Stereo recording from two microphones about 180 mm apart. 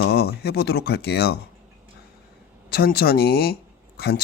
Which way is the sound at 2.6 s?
60° left (ahead or behind).